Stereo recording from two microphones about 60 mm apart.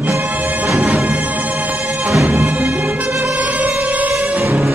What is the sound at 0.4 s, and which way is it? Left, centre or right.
Music, right.